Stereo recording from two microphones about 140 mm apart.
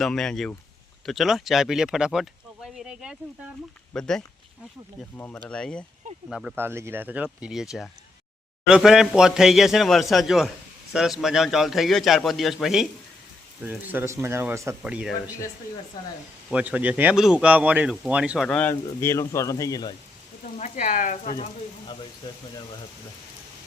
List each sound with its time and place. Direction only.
0.0 s speech: 5° left (ahead or behind)
6.6 s speech: 20° right (ahead or behind); by 12.9 s centre (ahead or behind)
13.7 s speech: 15° right (ahead or behind)
14.8 s speech: 10° right (ahead or behind)
16.5 s speech: 10° right (ahead or behind)
18.4 s speech: 10° left (ahead or behind)
18.7 s speech: 20° left (ahead or behind)
20.4 s speech: 55° left (ahead or behind)